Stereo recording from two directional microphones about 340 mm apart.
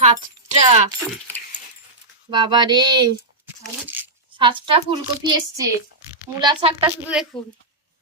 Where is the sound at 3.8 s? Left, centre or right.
Centre.